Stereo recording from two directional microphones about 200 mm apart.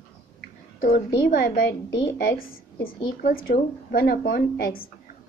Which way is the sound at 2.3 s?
80° left.